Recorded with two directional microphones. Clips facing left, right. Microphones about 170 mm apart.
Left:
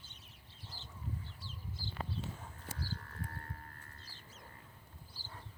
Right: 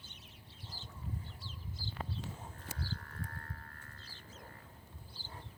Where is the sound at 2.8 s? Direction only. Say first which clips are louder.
Even; 30° left (ahead or behind).